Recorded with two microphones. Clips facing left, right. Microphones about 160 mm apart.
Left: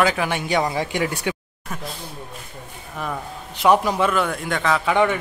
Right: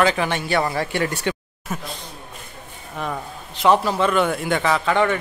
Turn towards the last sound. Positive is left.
turn(degrees=10)  # may be behind; listen again after turning